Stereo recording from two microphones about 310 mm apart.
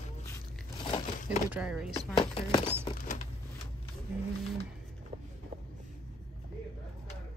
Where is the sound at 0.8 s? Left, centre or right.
Centre.